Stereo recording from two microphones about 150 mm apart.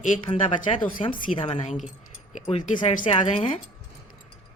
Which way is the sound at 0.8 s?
65° left (ahead or behind).